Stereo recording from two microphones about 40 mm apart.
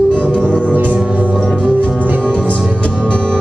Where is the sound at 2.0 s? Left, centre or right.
Right.